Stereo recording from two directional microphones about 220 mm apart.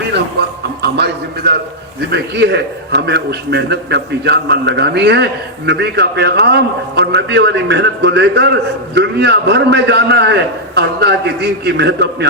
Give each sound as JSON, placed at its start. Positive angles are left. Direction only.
{"t": 0.8, "sound": "a man's voice", "side_deg": -50}